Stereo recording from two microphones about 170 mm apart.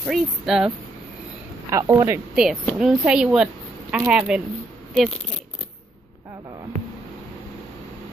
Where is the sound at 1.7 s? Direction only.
20° right (ahead or behind).